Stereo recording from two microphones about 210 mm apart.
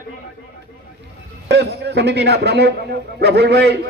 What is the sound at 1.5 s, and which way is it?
A man's voice, 55° right (ahead or behind).